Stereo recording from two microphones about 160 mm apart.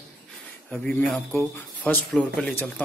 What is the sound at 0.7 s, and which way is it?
Speech, 5° left (ahead or behind).